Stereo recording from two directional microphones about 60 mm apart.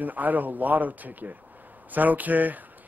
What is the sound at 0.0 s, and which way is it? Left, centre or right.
Speech, right.